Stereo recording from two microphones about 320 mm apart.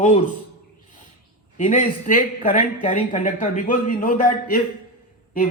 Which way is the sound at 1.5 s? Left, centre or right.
Left.